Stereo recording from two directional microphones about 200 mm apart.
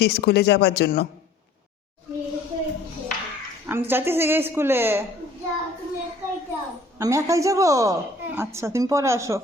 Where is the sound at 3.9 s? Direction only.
10° right (ahead or behind).